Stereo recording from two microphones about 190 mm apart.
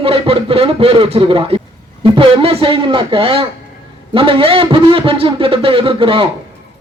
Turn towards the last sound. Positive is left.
turn(degrees=-30)  # may be behind; listen again after turning